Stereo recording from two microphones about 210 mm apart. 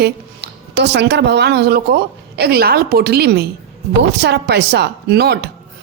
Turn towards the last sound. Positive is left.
turn(degrees=-50)  # may be behind; listen again after turning